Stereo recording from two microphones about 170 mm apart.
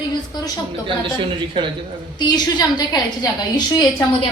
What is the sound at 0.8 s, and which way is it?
Speech, 30° right (ahead or behind).